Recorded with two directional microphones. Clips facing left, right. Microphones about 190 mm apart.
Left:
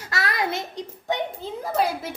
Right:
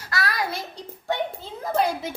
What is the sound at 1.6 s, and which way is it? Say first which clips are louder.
Speech: right 1 dB; 5° left (ahead or behind).